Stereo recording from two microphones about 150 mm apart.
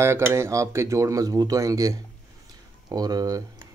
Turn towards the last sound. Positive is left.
turn(degrees=-25)  # may be behind; listen again after turning